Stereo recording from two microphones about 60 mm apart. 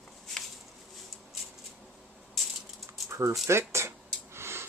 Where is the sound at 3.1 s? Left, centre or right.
Right.